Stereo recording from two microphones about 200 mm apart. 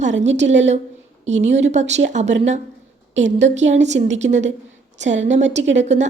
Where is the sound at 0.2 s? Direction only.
35° right (ahead or behind).